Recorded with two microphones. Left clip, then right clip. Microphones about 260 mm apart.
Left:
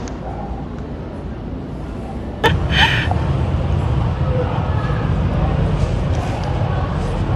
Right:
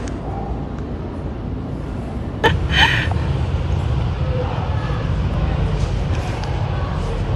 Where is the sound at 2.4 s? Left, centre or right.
Centre.